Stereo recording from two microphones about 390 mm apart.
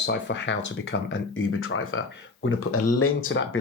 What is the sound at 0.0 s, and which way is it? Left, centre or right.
Speech, left.